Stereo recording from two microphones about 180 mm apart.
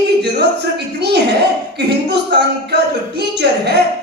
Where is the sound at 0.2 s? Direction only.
65° right (ahead or behind).